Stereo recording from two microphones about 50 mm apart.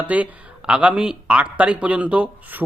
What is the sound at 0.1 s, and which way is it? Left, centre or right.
Speech, right.